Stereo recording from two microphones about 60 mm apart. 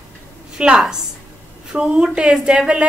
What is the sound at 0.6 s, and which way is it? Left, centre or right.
A woman's voice, centre.